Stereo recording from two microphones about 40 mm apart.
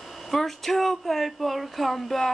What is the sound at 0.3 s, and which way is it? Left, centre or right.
Speech, centre.